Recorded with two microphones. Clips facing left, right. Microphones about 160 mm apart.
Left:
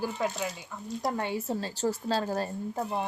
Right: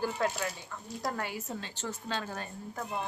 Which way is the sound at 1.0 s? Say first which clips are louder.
Left 5 dB; 25° left (ahead or behind).